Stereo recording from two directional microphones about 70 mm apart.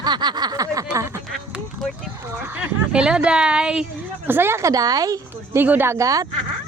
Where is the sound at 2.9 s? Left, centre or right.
Centre.